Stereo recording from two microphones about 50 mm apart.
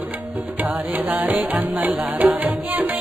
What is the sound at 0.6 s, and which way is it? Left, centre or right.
Music, right.